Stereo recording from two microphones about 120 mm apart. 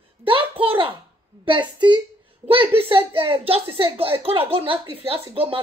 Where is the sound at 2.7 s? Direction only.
50° right (ahead or behind).